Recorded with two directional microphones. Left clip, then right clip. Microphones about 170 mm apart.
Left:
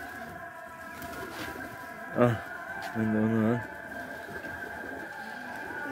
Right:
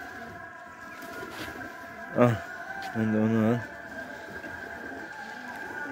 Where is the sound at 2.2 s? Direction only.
25° right (ahead or behind).